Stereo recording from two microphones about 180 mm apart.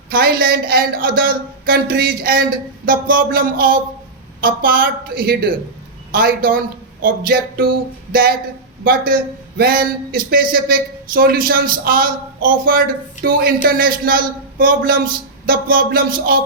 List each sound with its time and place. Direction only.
0.1 s speech: 55° right (ahead or behind)